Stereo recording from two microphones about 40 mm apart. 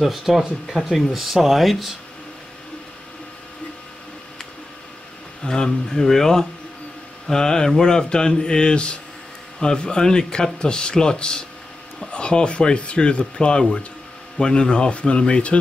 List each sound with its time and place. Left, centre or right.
0.0 s speech: centre
5.4 s speech: centre